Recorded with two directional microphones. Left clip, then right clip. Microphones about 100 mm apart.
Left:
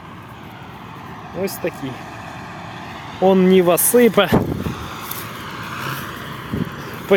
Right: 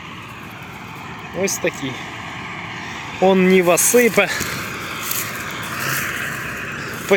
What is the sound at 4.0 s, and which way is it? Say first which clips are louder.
Speech: left 2 dB; 30° left (ahead or behind).